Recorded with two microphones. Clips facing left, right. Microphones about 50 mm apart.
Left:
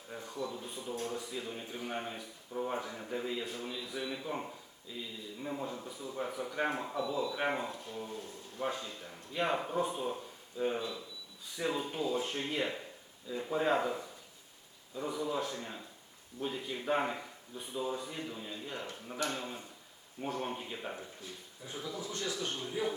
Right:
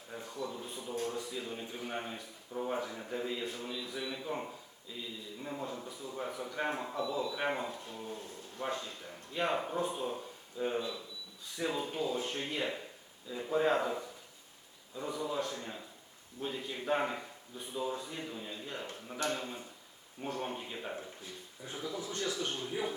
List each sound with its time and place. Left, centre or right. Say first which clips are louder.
0.3 s speech: left 1 dB; centre
21.8 s a man's voice: right 1 dB; centre
22.0 s speech: right 2 dB; right
22.5 s a man's voice: even; centre